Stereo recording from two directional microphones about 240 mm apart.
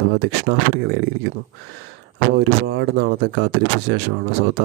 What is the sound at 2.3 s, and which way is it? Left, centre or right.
Speech, right.